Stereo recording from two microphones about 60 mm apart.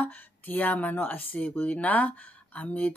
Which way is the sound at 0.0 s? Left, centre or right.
Left.